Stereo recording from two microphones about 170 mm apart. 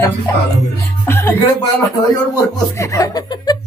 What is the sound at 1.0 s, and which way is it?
Speech, 15° left (ahead or behind).